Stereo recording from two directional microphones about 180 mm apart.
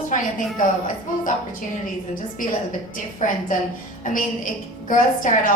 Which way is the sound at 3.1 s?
45° left (ahead or behind).